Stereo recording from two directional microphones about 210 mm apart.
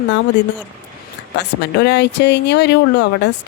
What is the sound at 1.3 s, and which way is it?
Speech, 55° left (ahead or behind).